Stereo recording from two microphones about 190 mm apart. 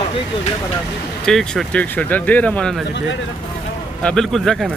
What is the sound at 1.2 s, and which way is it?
Speech, 5° left (ahead or behind).